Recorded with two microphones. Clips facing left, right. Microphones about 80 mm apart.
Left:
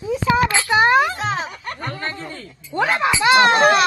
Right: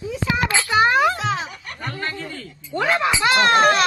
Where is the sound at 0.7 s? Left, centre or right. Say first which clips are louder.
Left 2 dB; left.